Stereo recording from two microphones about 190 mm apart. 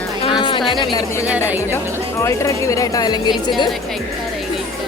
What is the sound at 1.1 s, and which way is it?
Speech, 15° left (ahead or behind).